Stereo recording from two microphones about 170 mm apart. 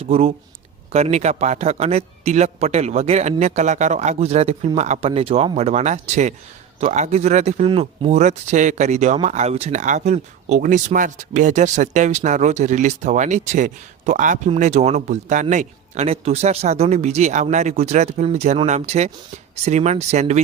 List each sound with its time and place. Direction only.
0.1 s a man's voice: 35° right (ahead or behind)